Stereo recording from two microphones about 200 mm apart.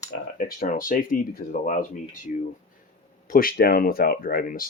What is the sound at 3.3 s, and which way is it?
Speech, 45° left (ahead or behind).